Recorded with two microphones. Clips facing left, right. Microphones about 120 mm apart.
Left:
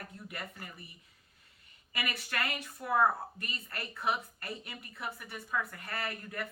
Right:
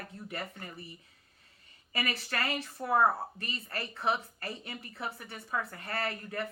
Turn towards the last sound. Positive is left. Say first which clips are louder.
# right 4 dB
turn(degrees=-30)  # may be behind; listen again after turning